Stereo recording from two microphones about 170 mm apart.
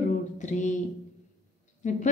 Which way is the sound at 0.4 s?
45° left (ahead or behind).